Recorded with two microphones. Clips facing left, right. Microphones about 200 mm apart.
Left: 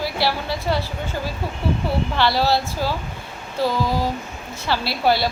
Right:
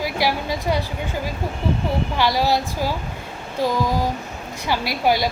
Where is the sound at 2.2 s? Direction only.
15° right (ahead or behind).